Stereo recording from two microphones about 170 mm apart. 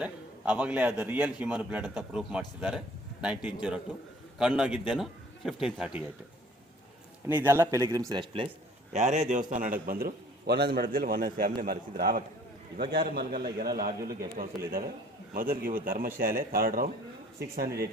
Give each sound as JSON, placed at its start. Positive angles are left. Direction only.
{"t": 0.0, "sound": "a man's voice", "side_deg": -10}
{"t": 7.3, "sound": "speech", "side_deg": -10}
{"t": 8.9, "sound": "a man's voice", "side_deg": -45}